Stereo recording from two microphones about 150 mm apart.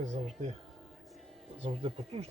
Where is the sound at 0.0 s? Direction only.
50° right (ahead or behind).